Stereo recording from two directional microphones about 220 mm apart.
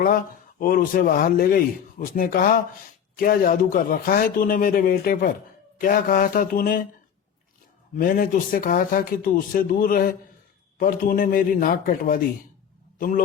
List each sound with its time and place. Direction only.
0.6 s speech: 40° left (ahead or behind)
7.9 s speech: 40° left (ahead or behind)